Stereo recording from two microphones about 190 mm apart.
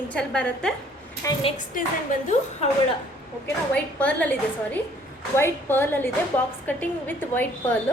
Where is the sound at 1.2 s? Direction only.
15° left (ahead or behind).